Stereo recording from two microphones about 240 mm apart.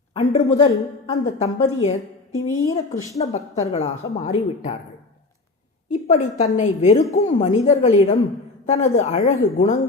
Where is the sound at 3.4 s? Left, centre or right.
Left.